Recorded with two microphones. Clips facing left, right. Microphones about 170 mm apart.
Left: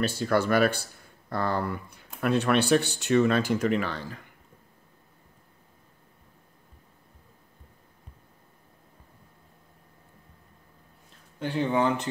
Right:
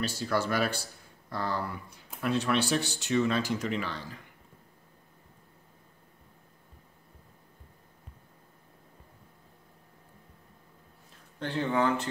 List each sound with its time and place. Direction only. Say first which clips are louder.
0.0 s speech: left 5 dB; 55° left (ahead or behind)
11.3 s speech: left 3 dB; 10° left (ahead or behind)